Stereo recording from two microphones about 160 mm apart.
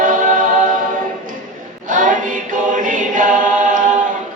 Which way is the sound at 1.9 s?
55° right (ahead or behind).